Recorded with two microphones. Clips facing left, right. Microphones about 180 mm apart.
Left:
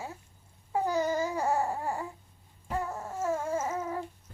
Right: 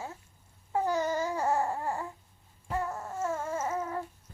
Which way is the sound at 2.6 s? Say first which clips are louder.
Even; 10° left (ahead or behind).